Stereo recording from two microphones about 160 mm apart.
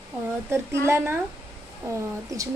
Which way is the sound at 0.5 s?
15° right (ahead or behind).